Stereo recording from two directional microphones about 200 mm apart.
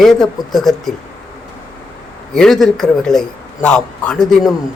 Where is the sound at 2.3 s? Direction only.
Centre (ahead or behind).